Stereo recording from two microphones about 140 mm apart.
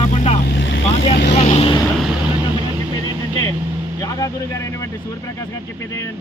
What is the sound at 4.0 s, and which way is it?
Speech, 25° left (ahead or behind).